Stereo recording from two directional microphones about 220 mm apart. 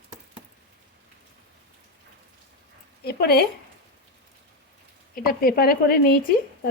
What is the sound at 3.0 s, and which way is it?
Speech, 45° left (ahead or behind).